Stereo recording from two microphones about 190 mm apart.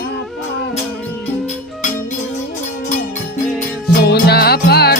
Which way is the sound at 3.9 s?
55° left (ahead or behind).